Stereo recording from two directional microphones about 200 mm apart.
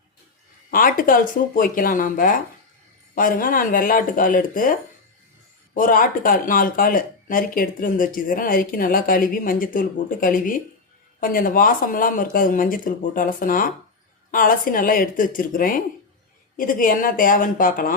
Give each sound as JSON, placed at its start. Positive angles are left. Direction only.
{"t": 0.7, "sound": "speech", "side_deg": 45}